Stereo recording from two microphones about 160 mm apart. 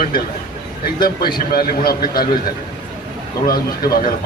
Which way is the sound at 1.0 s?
70° left (ahead or behind).